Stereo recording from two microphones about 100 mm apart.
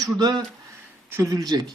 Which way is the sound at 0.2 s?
40° right (ahead or behind).